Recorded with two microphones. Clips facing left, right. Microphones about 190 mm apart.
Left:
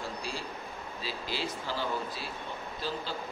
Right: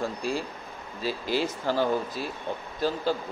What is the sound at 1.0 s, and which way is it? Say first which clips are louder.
Speech: right 9 dB; 45° right (ahead or behind).